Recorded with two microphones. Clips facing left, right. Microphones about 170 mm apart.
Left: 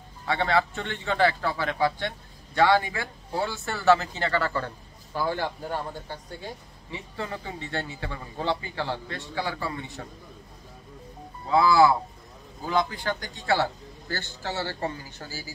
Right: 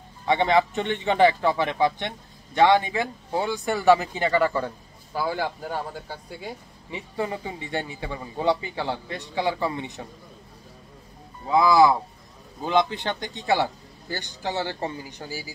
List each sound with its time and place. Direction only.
0.2 s a man's voice: 20° right (ahead or behind)
11.5 s speech: 15° right (ahead or behind)